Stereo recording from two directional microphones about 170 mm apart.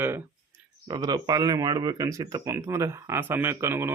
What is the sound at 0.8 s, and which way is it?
Speech, 25° right (ahead or behind).